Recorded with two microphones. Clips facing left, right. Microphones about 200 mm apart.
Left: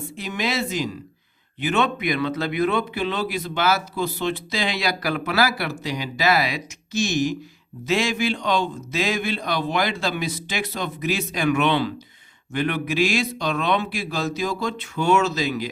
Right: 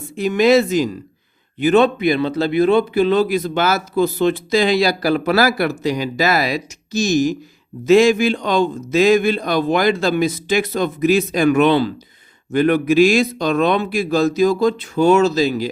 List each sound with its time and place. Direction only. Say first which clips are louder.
0.2 s speech: right 13 dB; 45° right (ahead or behind)